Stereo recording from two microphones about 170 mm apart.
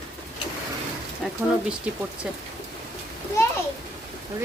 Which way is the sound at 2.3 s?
5° right (ahead or behind).